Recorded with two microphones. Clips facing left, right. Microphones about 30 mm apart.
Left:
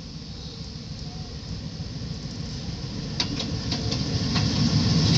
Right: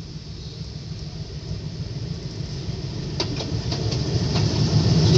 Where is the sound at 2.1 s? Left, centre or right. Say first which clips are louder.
Right 1 dB; centre.